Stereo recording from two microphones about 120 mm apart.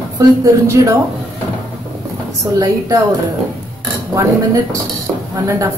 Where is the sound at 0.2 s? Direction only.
30° right (ahead or behind).